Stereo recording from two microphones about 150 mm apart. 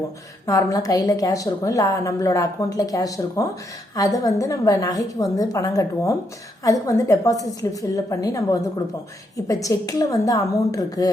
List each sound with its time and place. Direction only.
0.4 s a woman's voice: 25° left (ahead or behind)